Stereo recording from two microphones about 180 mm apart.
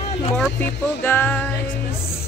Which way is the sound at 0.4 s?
10° left (ahead or behind).